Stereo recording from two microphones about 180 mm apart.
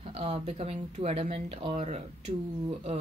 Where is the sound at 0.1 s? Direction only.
35° right (ahead or behind).